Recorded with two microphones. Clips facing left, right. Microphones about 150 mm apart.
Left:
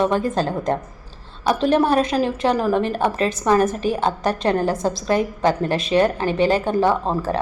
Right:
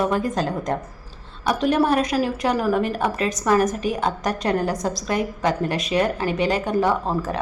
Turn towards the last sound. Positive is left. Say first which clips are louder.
# left 2 dB
turn(degrees=30)  # may be behind; listen again after turning